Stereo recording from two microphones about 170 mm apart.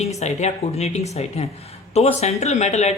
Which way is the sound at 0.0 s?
40° left (ahead or behind).